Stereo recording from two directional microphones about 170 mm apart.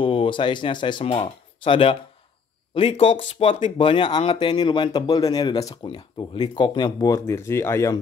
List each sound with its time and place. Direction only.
0.0 s speech: 30° left (ahead or behind)